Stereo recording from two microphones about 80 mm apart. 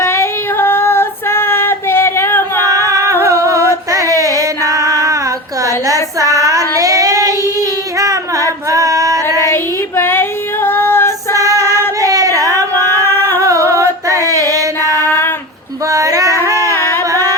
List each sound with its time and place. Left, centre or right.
0.0 s female singing: left
2.6 s female singing: right
3.9 s a sound: right
5.6 s child singing: right
7.9 s female singing: right
8.7 s male singing: right
10.0 s female singing: left
11.3 s child singing: right
13.4 s music: right
15.9 s female singing: right
17.1 s music: right